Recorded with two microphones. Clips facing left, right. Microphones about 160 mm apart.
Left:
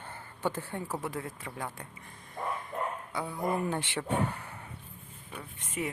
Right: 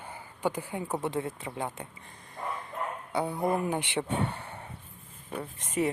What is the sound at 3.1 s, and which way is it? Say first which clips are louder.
Speech: right 9 dB; 30° right (ahead or behind).